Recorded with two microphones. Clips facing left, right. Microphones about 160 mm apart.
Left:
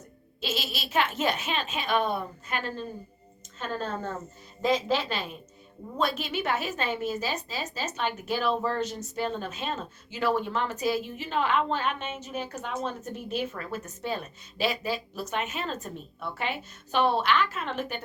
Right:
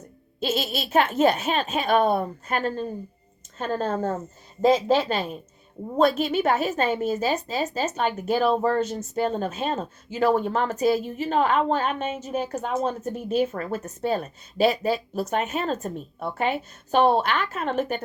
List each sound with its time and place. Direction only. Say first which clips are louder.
0.4 s a woman's voice: right 7 dB; 45° right (ahead or behind)